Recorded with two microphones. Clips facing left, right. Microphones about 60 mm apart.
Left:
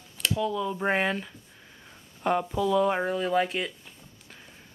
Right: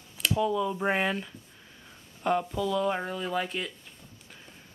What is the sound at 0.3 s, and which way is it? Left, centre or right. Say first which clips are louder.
Speech: right 1 dB; centre.